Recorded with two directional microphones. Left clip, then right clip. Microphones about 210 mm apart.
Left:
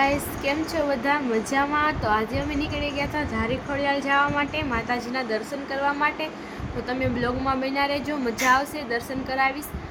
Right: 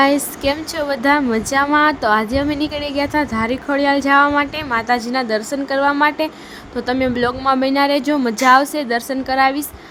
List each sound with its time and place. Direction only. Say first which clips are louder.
0.0 s a woman's voice: right 8 dB; 55° right (ahead or behind)